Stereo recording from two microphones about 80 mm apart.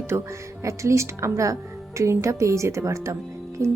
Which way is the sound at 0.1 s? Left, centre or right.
Right.